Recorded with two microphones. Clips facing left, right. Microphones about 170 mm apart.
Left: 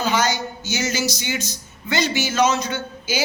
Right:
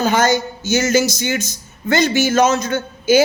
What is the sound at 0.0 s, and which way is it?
Speech, 50° right (ahead or behind).